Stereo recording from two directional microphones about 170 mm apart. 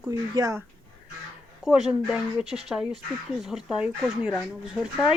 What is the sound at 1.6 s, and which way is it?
Speech, 5° right (ahead or behind).